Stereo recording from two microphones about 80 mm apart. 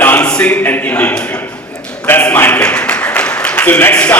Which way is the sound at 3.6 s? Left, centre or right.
Left.